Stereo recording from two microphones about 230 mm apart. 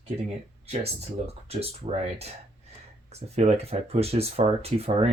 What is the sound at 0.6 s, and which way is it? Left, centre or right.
Speech, right.